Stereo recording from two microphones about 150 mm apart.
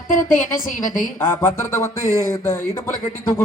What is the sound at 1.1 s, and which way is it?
A woman's voice, 15° left (ahead or behind).